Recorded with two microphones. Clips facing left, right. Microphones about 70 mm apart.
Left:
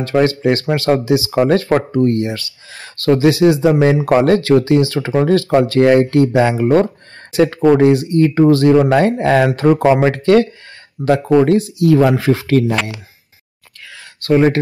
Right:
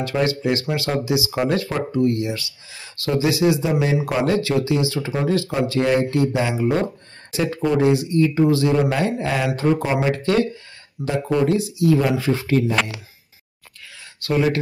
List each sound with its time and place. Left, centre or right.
0.1 s speech: left
9.7 s speech: left
10.1 s speech: left
11.0 s speech: left
11.9 s speech: left
14.2 s speech: left